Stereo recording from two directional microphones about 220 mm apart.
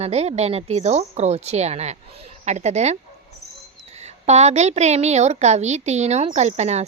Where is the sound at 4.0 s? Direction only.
30° right (ahead or behind).